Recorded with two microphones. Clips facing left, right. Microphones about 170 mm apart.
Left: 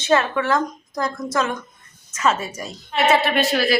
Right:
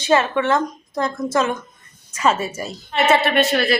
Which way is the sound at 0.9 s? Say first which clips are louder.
Right 3 dB; centre (ahead or behind).